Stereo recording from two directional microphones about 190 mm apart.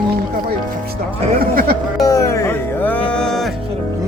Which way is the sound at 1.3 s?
50° right (ahead or behind).